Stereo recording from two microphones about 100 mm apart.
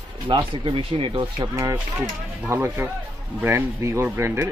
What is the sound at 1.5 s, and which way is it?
Speech, 30° right (ahead or behind).